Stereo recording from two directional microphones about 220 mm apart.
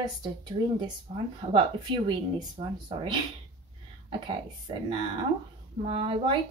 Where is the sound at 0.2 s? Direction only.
20° right (ahead or behind).